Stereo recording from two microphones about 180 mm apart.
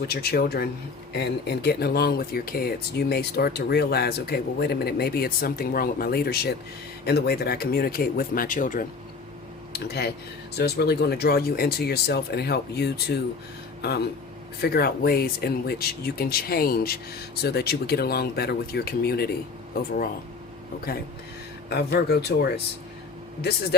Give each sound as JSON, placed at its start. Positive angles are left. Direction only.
{"t": 0.0, "sound": "speech", "side_deg": 60}
{"t": 9.9, "sound": "speech", "side_deg": 65}
{"t": 14.6, "sound": "speech", "side_deg": 60}
{"t": 21.7, "sound": "speech", "side_deg": 65}